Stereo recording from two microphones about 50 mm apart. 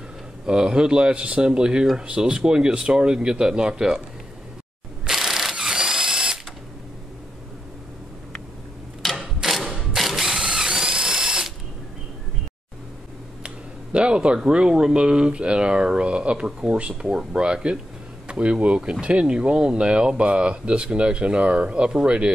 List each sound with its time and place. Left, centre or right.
0.5 s speech: centre
5.0 s drill: centre
9.0 s mechanisms: centre
13.9 s speech: centre